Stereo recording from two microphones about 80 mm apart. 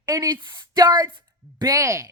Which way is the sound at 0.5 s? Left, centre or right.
Right.